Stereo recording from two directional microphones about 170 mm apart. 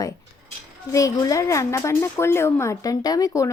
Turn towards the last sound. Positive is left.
turn(degrees=20)  # may be behind; listen again after turning